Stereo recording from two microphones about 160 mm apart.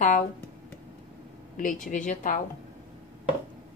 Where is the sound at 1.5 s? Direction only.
50° left (ahead or behind).